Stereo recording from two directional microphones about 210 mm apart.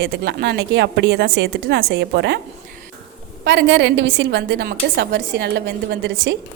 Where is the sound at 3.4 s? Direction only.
55° right (ahead or behind).